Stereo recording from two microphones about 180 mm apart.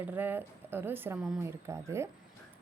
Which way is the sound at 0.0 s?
10° right (ahead or behind).